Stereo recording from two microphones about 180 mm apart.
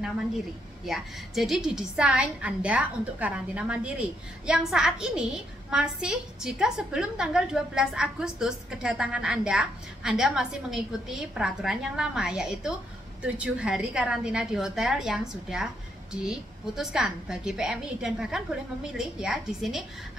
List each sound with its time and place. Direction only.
0.8 s a woman's voice: centre (ahead or behind)